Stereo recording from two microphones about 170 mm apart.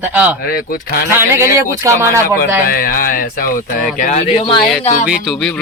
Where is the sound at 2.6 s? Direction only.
55° left (ahead or behind).